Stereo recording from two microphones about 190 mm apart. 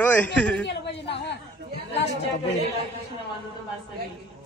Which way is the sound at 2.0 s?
65° left (ahead or behind).